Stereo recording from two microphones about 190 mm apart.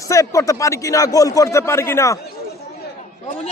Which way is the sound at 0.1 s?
15° left (ahead or behind).